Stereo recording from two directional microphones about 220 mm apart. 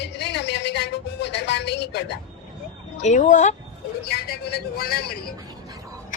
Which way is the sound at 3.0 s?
35° left (ahead or behind).